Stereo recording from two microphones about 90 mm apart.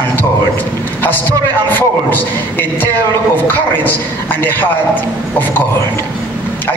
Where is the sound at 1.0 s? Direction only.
20° left (ahead or behind).